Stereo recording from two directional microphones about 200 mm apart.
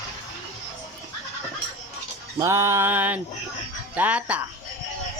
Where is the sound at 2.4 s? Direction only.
15° right (ahead or behind).